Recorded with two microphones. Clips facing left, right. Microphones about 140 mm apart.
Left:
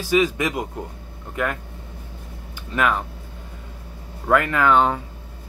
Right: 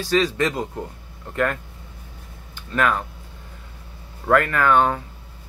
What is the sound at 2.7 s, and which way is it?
Speech, 15° left (ahead or behind).